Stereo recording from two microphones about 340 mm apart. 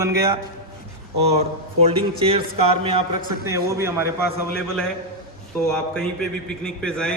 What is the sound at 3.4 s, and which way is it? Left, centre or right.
Speech, centre.